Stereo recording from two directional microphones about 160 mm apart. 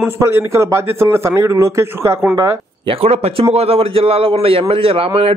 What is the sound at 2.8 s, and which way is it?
A man's voice, 35° right (ahead or behind).